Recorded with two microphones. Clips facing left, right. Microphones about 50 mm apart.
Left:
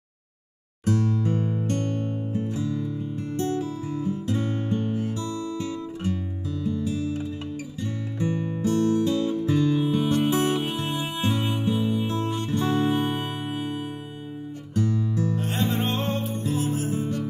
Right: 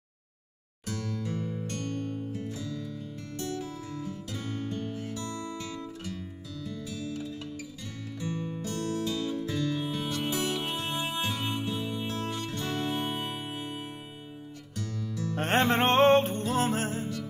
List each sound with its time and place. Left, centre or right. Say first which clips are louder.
0.8 s music: left 10 dB; left
5.3 s guitar: left 6 dB; right
5.6 s guitar: left 8 dB; left
6.6 s music: left 10 dB; left
14.7 s music: left 12 dB; left
15.3 s music: right 1 dB; right
17.0 s music: left 7 dB; left